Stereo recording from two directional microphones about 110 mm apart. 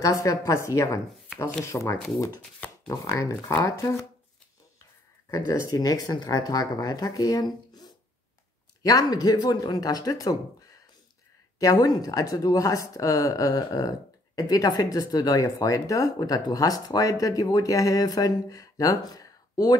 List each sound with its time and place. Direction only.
0.0 s a woman's voice: 30° left (ahead or behind)
3.1 s a woman's voice: 30° left (ahead or behind)
5.5 s speech: 35° left (ahead or behind)
8.8 s speech: 35° left (ahead or behind)
11.6 s speech: 35° left (ahead or behind)